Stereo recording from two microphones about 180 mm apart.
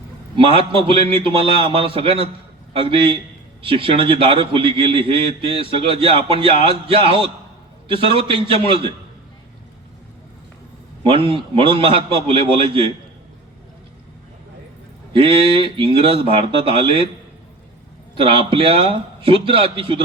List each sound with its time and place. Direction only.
0.3 s a man's voice: 30° right (ahead or behind)
3.6 s a man's voice: 30° right (ahead or behind)
7.9 s a man's voice: 30° right (ahead or behind)
11.1 s a man's voice: 30° right (ahead or behind)
15.1 s a man's voice: 30° right (ahead or behind)
18.2 s a man's voice: 30° right (ahead or behind)